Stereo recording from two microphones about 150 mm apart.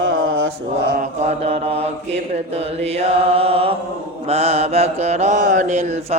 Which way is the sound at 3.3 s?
40° right (ahead or behind).